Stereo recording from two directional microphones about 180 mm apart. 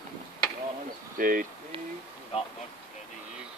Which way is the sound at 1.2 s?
55° right (ahead or behind).